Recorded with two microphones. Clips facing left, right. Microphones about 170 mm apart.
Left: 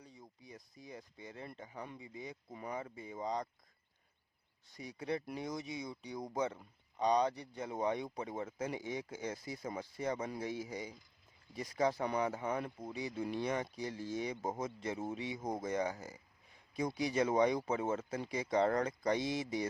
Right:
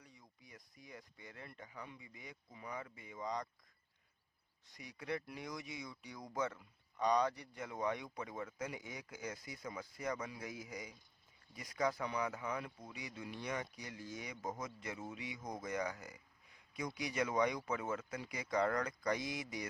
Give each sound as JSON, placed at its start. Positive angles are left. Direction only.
{"t": 0.0, "sound": "speech", "side_deg": 25}
{"t": 2.5, "sound": "speech", "side_deg": 45}
{"t": 2.7, "sound": "speech", "side_deg": 30}
{"t": 4.8, "sound": "speech", "side_deg": 25}